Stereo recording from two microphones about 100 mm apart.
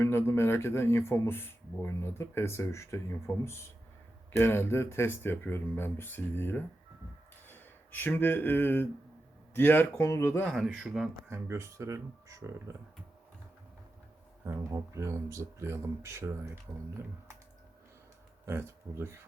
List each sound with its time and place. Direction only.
0.0 s speech: 25° left (ahead or behind)
10.7 s speech: 10° right (ahead or behind)
11.3 s speech: 25° right (ahead or behind)
14.4 s speech: 30° right (ahead or behind)
18.4 s speech: 25° right (ahead or behind)